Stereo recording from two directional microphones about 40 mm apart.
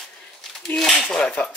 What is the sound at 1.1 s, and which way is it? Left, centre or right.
Speech, centre.